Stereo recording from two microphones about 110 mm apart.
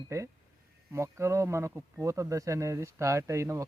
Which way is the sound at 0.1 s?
25° right (ahead or behind).